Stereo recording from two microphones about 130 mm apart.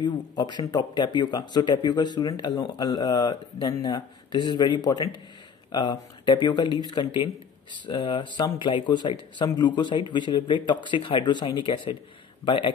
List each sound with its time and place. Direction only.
0.0 s speech: 30° left (ahead or behind)